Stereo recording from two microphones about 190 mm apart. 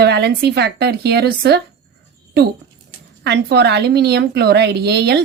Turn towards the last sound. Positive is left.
turn(degrees=-60)  # may be behind; listen again after turning